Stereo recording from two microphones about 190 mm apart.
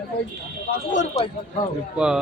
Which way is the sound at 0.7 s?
40° left (ahead or behind).